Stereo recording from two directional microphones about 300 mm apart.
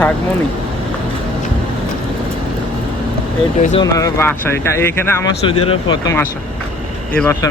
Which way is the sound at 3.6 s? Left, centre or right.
Left.